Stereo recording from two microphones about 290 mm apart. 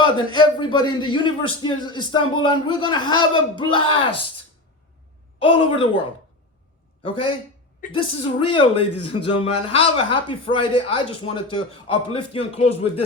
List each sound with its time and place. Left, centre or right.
0.0 s speech: centre
5.4 s speech: centre